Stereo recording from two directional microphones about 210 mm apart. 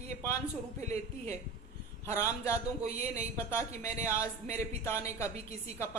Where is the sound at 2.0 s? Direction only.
15° left (ahead or behind).